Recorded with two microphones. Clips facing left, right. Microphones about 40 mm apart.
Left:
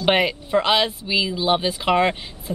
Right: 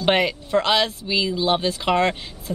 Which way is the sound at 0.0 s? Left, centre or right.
Centre.